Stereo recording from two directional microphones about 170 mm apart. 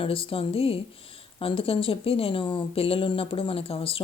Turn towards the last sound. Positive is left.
turn(degrees=35)  # may be behind; listen again after turning